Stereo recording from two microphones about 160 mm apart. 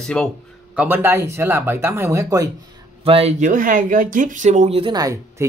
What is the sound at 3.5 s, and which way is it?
Speech, 55° right (ahead or behind).